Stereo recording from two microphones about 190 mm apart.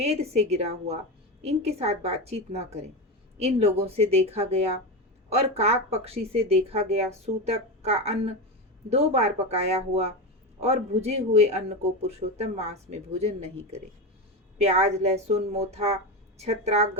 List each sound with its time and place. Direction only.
0.0 s speech: 35° right (ahead or behind)